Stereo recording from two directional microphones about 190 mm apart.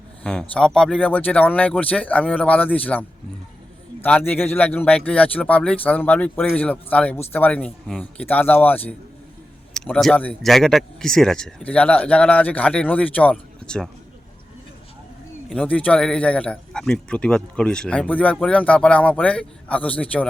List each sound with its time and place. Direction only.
0.2 s speech: 5° left (ahead or behind)
15.4 s speech: 5° left (ahead or behind)